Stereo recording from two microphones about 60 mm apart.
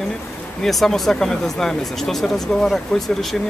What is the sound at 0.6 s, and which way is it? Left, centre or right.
Speech, centre.